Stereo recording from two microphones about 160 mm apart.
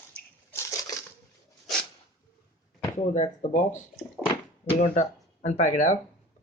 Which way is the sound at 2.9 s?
50° left (ahead or behind).